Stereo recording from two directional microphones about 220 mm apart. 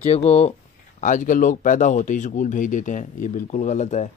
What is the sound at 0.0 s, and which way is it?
A man's voice, 30° left (ahead or behind).